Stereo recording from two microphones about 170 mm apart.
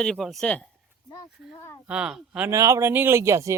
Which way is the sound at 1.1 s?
20° left (ahead or behind).